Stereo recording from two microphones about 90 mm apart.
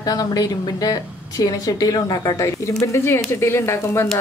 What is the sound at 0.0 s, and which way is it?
A woman's voice, 45° left (ahead or behind).